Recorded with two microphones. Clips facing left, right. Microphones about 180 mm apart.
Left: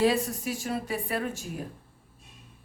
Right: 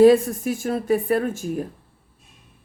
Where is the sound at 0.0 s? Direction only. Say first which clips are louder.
Right 11 dB; 50° right (ahead or behind).